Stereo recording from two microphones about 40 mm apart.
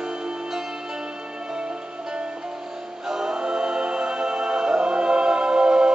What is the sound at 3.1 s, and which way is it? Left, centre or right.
Music, centre.